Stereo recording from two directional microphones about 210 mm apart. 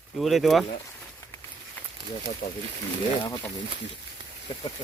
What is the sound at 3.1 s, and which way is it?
Speech, 15° left (ahead or behind).